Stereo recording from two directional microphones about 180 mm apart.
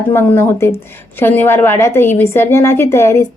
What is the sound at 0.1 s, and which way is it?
A woman's voice, 15° left (ahead or behind).